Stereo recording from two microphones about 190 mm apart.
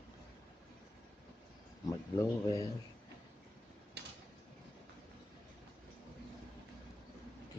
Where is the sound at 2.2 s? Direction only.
15° left (ahead or behind).